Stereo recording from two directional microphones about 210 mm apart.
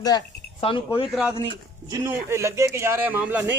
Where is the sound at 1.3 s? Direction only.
20° right (ahead or behind).